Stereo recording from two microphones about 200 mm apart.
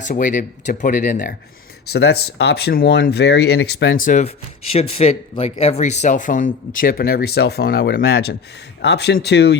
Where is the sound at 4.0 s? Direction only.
40° left (ahead or behind).